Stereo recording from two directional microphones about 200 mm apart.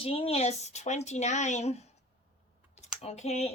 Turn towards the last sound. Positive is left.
turn(degrees=35)  # may be behind; listen again after turning